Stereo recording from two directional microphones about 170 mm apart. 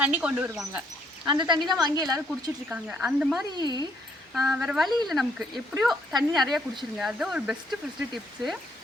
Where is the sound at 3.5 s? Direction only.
25° right (ahead or behind).